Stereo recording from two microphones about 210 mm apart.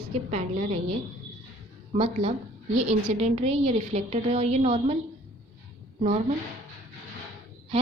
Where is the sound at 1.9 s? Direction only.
30° right (ahead or behind).